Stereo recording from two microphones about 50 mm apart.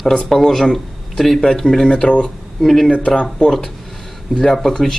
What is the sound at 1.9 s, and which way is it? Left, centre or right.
Speech, left.